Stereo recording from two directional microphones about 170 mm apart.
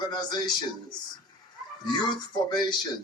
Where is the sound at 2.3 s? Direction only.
25° left (ahead or behind).